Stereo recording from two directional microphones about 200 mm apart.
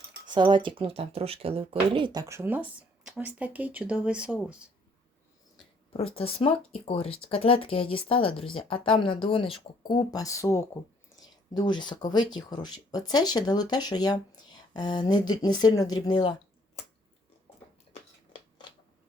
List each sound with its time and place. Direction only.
0.3 s speech: 20° right (ahead or behind); by 4.7 s 5° right (ahead or behind)
5.9 s speech: 30° left (ahead or behind)